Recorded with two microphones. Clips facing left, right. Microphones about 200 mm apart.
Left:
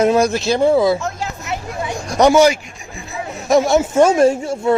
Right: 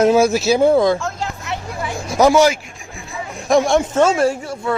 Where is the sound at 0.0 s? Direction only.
Centre (ahead or behind).